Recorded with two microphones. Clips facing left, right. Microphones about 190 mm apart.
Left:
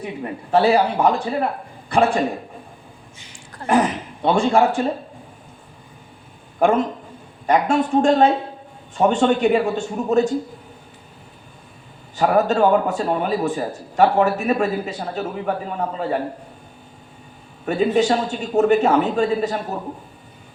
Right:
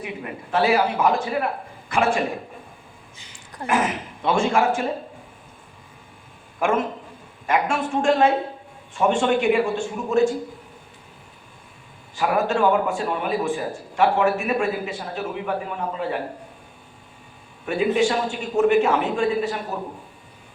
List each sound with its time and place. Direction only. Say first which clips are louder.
0.5 s a man's voice: left 4 dB; 35° left (ahead or behind)
3.7 s a man's voice: left 5 dB; 35° left (ahead or behind)
6.6 s a man's voice: left 5 dB; 35° left (ahead or behind)
12.1 s a man's voice: left 4 dB; 40° left (ahead or behind)
17.7 s a man's voice: left 3 dB; 40° left (ahead or behind)